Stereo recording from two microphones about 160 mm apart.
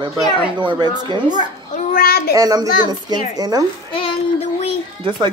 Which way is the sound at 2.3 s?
25° right (ahead or behind).